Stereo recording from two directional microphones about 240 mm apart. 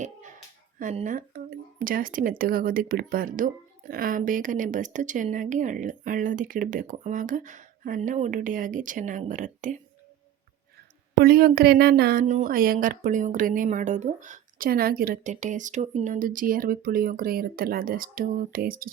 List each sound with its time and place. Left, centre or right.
0.8 s speech: right
11.2 s speech: right